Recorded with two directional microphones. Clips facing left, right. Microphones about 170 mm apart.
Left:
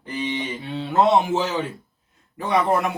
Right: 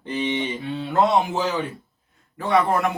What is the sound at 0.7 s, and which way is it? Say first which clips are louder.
A man's voice: left 2 dB; 25° left (ahead or behind).